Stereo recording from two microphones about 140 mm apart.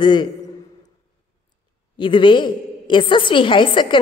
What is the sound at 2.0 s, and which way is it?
A woman's voice, 35° left (ahead or behind).